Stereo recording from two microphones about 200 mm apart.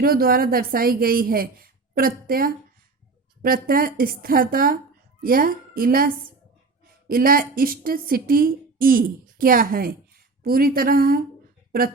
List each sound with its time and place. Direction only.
0.0 s a woman's voice: 45° right (ahead or behind)